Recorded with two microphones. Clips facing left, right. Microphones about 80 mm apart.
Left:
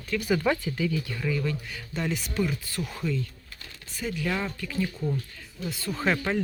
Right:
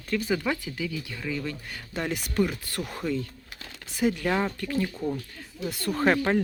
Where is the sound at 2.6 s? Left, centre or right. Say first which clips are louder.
Even; right.